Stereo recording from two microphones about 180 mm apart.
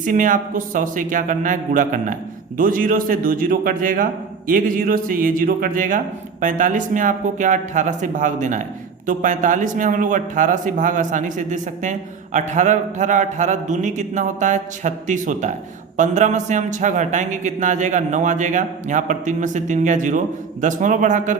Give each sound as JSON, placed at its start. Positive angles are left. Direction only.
{"t": 0.0, "sound": "a man's voice", "side_deg": -45}